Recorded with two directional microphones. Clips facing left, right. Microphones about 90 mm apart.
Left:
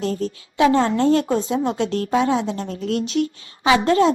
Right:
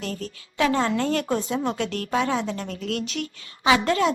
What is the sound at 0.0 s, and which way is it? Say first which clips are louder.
A woman's voice: left 8 dB; 30° left (ahead or behind).